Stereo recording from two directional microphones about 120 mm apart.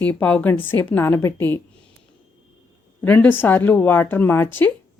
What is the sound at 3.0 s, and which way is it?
A woman's voice, 15° left (ahead or behind).